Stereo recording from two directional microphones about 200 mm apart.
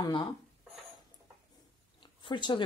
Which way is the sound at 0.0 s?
20° left (ahead or behind).